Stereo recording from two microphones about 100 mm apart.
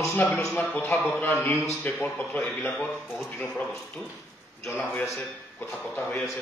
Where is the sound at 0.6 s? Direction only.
20° left (ahead or behind).